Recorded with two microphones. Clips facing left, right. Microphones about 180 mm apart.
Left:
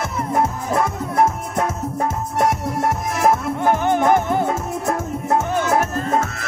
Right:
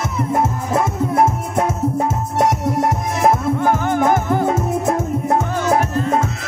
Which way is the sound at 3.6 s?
20° left (ahead or behind).